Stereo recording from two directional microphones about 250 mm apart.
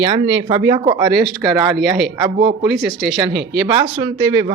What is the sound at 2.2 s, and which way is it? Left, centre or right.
Speech, centre.